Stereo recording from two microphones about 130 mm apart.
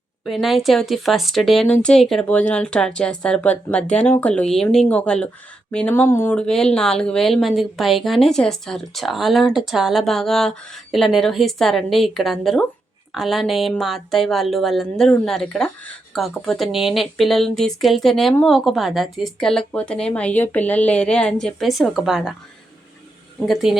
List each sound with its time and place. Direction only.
0.3 s a woman's voice: centre (ahead or behind); by 6.3 s 20° left (ahead or behind)
6.3 s a woman's voice: 5° left (ahead or behind)
23.4 s a woman's voice: centre (ahead or behind)